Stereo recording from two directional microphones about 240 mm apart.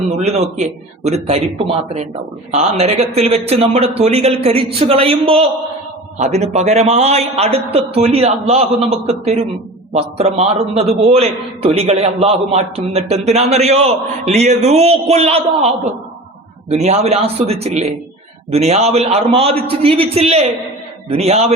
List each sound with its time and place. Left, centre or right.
0.3 s a man's voice: right